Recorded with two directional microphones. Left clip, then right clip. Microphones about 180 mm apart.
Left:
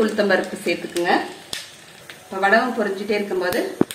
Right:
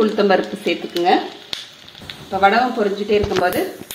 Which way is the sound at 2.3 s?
40° right (ahead or behind).